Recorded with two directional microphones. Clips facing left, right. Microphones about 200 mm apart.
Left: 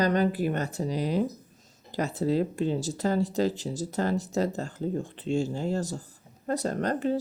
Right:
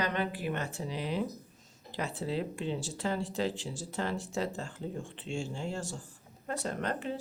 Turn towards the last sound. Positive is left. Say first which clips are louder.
# left 7 dB
turn(degrees=40)  # may be behind; listen again after turning